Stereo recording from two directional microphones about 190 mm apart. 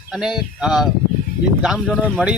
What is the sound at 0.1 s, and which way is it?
Speech, 5° right (ahead or behind).